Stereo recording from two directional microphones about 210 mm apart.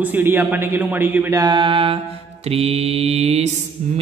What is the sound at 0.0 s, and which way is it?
Speech, 10° right (ahead or behind).